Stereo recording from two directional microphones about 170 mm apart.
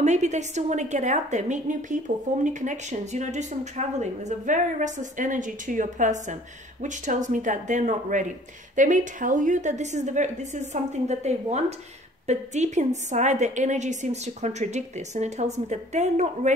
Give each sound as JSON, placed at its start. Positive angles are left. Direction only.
{"t": 0.0, "sound": "a woman's voice", "side_deg": -45}